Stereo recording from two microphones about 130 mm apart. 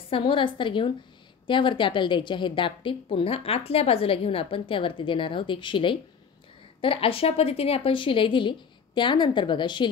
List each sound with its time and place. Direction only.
0.1 s a woman's voice: 40° left (ahead or behind)